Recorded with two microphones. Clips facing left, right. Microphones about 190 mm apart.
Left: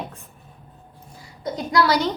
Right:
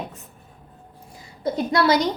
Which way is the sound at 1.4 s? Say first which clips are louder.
Right 1 dB; 25° right (ahead or behind).